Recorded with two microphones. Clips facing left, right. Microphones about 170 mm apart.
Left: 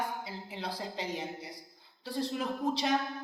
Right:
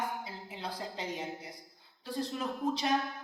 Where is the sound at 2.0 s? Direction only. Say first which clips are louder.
Left 2 dB; 30° left (ahead or behind).